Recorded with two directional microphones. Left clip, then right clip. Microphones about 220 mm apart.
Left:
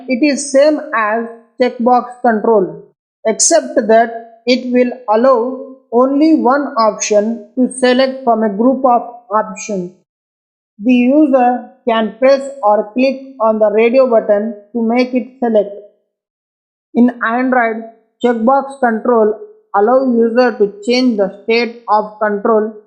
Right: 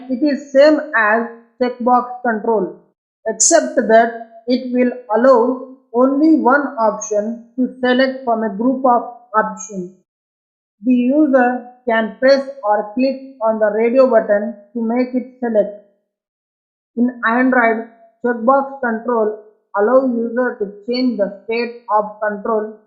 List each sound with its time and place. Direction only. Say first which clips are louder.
0.2 s speech: even; 30° left (ahead or behind)
10.8 s a woman's voice: left 4 dB; 25° left (ahead or behind)
16.9 s speech: left 3 dB; 40° left (ahead or behind)